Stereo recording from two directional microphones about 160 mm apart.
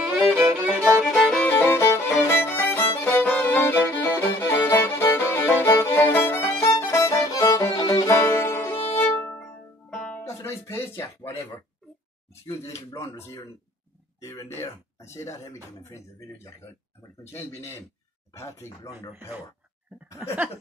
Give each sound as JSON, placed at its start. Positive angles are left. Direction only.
{"t": 0.0, "sound": "violin", "side_deg": -10}
{"t": 1.0, "sound": "music", "side_deg": 0}
{"t": 3.0, "sound": "violin", "side_deg": 10}
{"t": 9.4, "sound": "music", "side_deg": 5}
{"t": 12.4, "sound": "speech", "side_deg": 20}
{"t": 17.3, "sound": "speech", "side_deg": 15}